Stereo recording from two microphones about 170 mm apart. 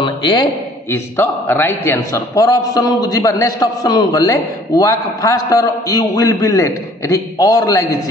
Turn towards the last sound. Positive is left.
turn(degrees=20)  # may be behind; listen again after turning